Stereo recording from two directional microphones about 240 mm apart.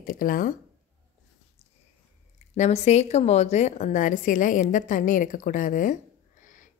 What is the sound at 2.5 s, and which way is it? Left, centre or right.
Speech, left.